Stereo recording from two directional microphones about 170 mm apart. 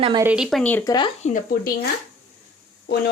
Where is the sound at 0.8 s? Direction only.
25° left (ahead or behind).